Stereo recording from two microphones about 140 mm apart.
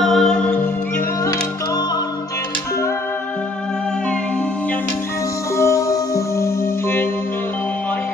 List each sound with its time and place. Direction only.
0.0 s music: centre (ahead or behind); by 1.9 s 20° left (ahead or behind)
5.6 s music: 20° left (ahead or behind)